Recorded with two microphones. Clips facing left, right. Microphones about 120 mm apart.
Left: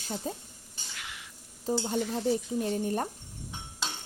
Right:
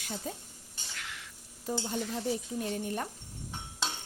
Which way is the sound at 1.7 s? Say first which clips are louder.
Left 4 dB; 30° left (ahead or behind).